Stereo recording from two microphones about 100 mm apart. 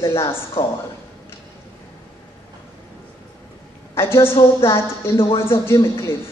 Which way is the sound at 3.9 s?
25° left (ahead or behind).